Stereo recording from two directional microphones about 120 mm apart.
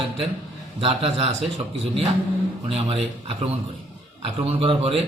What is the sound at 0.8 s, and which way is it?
Speech, 50° right (ahead or behind).